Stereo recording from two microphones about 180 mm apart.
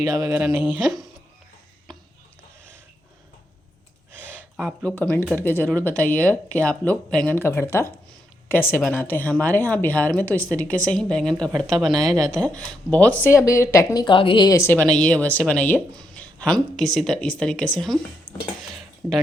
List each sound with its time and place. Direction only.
0.0 s speech: 20° right (ahead or behind)
4.2 s a sound: 10° left (ahead or behind)
4.8 s a woman's voice: 5° left (ahead or behind)
11.9 s speech: 20° right (ahead or behind)
12.4 s a woman's voice: 5° left (ahead or behind)
18.3 s dishes: 50° left (ahead or behind)